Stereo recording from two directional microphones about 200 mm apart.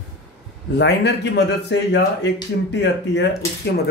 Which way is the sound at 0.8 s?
60° left (ahead or behind).